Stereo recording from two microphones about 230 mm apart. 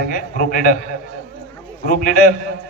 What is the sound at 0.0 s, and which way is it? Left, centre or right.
Speech, left.